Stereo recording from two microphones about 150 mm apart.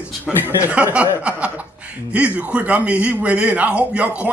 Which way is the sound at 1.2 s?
10° right (ahead or behind).